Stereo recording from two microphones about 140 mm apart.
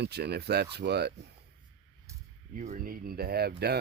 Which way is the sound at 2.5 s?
70° right (ahead or behind).